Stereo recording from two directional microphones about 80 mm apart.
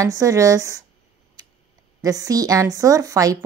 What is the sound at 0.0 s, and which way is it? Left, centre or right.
Speech, right.